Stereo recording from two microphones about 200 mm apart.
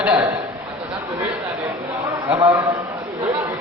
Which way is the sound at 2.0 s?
30° right (ahead or behind).